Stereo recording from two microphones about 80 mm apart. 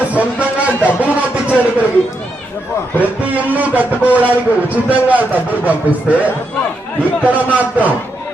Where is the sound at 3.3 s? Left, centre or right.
Centre.